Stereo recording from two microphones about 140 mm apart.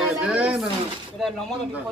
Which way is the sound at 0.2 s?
10° right (ahead or behind).